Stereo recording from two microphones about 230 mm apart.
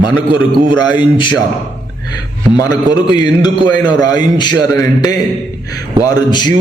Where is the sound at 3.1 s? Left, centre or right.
Centre.